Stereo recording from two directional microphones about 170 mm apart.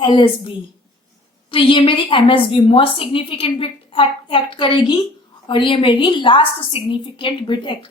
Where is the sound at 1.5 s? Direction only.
30° left (ahead or behind).